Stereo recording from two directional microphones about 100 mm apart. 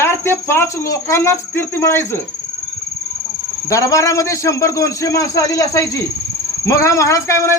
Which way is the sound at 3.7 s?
30° left (ahead or behind).